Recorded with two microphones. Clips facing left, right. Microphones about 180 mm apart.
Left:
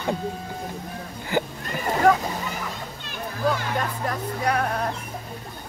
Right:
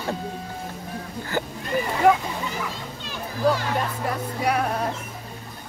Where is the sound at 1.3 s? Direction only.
15° left (ahead or behind).